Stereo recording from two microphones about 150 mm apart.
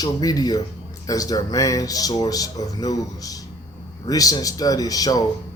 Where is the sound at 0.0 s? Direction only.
25° left (ahead or behind).